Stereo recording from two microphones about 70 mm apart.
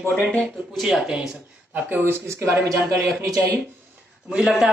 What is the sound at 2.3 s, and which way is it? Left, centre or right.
Speech, right.